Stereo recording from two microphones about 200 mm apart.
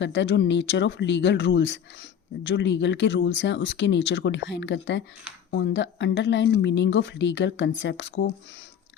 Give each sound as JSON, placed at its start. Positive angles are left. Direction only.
{"t": 0.0, "sound": "a woman's voice", "side_deg": 65}